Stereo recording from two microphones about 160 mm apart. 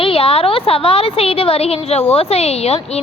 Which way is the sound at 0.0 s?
35° left (ahead or behind).